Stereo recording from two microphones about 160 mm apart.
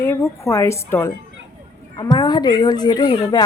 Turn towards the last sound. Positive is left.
turn(degrees=30)  # may be behind; listen again after turning